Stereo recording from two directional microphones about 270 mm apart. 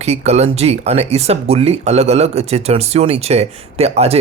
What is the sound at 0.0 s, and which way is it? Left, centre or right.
Speech, right.